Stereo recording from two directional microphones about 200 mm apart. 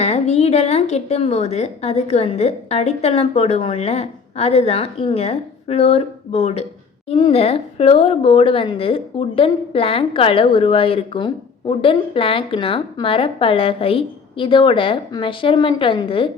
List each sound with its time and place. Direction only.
0.0 s a woman's voice: 35° left (ahead or behind)